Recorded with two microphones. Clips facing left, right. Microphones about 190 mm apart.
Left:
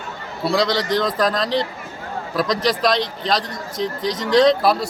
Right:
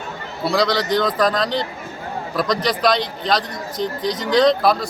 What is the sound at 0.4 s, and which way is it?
A man's voice, centre (ahead or behind).